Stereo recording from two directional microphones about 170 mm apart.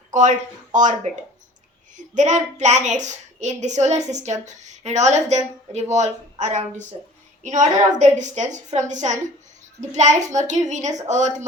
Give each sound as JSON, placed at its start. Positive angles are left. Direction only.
{"t": 0.1, "sound": "a woman's voice", "side_deg": -45}